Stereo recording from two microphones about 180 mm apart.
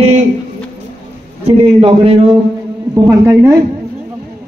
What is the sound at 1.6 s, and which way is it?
Speech, 30° right (ahead or behind).